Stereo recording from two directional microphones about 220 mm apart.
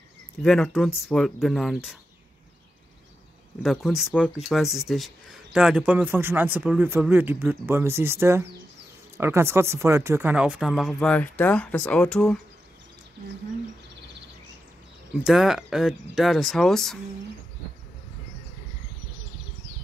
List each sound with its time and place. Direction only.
0.4 s speech: centre (ahead or behind)
3.6 s speech: centre (ahead or behind)
15.2 s speech: centre (ahead or behind)